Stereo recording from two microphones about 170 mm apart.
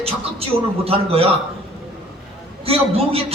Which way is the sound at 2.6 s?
35° right (ahead or behind).